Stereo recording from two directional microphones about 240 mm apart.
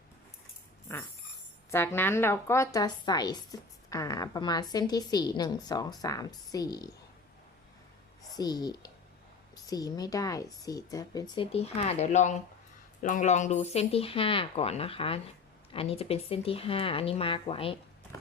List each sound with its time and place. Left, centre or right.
1.7 s a woman's voice: centre
8.4 s a woman's voice: centre
18.1 s a sound: centre